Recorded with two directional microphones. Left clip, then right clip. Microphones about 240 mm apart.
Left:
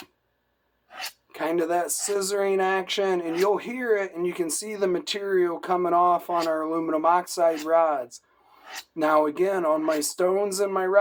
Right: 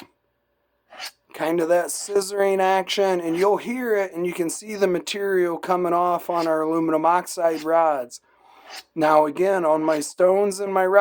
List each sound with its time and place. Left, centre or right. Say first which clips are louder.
1.3 s speech: right 5 dB; right